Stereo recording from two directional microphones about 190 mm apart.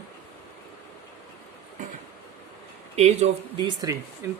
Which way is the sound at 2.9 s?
35° right (ahead or behind).